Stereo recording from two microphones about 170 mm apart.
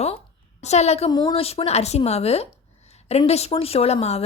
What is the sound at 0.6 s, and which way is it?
Speech, 40° left (ahead or behind).